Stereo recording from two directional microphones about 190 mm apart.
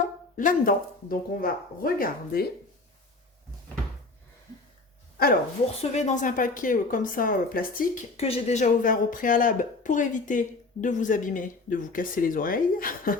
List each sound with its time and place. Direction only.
0.0 s speech: 45° left (ahead or behind)
5.8 s speech: 35° left (ahead or behind)
8.1 s speech: 35° left (ahead or behind)